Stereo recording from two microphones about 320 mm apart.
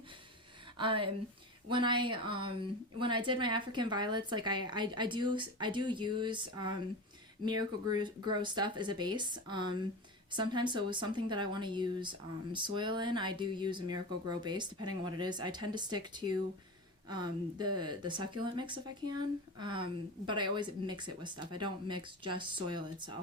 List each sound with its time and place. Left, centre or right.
0.8 s speech: centre